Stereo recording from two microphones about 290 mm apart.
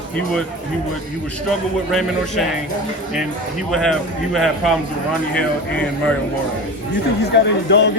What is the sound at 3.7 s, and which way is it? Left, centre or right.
A man's voice, centre.